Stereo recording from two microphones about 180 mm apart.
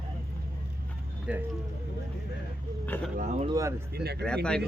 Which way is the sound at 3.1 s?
45° right (ahead or behind).